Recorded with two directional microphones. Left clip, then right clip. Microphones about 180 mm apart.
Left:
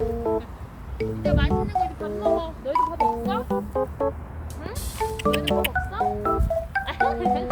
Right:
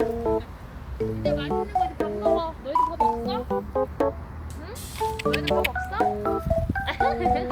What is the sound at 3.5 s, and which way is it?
Keyboard, centre (ahead or behind).